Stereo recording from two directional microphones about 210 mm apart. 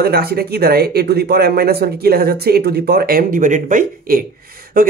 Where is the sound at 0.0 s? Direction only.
50° right (ahead or behind).